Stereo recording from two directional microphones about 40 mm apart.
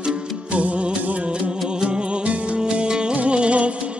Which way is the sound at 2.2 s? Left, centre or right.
Right.